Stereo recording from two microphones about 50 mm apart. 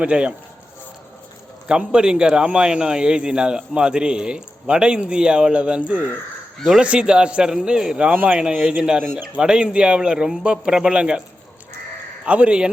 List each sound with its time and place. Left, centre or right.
0.0 s speech: right
1.6 s a man's voice: centre
8.1 s speech: right
8.6 s a man's voice: centre
12.2 s speech: right